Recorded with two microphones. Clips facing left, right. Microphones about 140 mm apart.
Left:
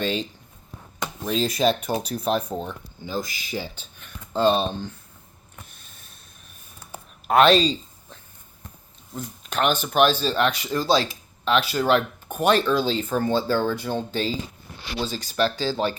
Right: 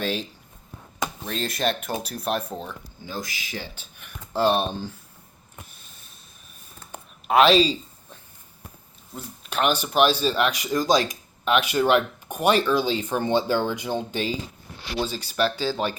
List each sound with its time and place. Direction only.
0.0 s speech: 5° right (ahead or behind)
1.3 s speech: centre (ahead or behind)
6.9 s a sound: centre (ahead or behind)
9.1 s speech: 5° right (ahead or behind)
15.1 s speech: 40° left (ahead or behind)